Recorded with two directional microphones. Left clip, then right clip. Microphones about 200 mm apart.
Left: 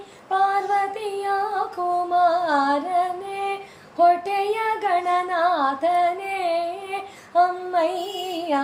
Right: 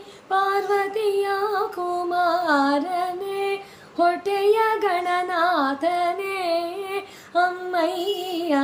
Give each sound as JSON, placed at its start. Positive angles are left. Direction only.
{"t": 0.3, "sound": "child singing", "side_deg": -20}
{"t": 1.8, "sound": "music", "side_deg": -20}